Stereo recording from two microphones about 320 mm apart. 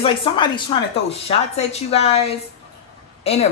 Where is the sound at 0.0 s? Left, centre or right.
Centre.